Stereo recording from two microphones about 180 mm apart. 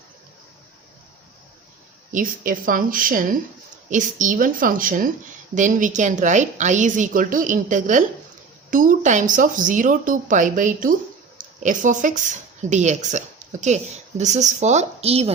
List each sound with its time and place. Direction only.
2.1 s a woman's voice: 50° right (ahead or behind); by 15.3 s 35° right (ahead or behind)